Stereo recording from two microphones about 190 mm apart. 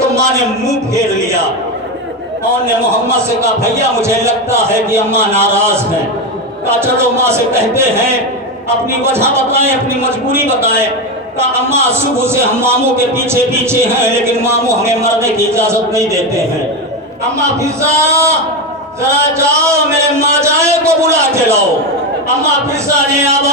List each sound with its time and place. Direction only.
0.1 s a man's voice: 15° right (ahead or behind)
3.4 s a man's voice: 15° right (ahead or behind)
8.9 s a man's voice: 15° right (ahead or behind)